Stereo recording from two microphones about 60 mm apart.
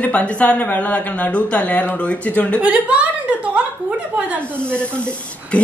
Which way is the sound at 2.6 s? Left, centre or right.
Right.